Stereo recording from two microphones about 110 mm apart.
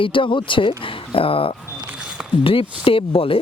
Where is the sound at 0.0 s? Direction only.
50° left (ahead or behind).